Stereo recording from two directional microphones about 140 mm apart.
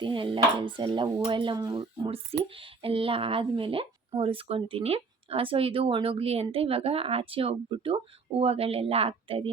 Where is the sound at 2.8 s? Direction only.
40° right (ahead or behind).